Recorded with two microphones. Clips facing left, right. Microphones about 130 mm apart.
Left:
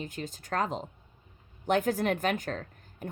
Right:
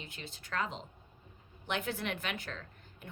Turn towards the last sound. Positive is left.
turn(degrees=45)  # may be behind; listen again after turning